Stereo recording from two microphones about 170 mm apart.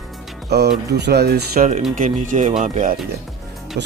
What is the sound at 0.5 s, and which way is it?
Speech, 75° right (ahead or behind).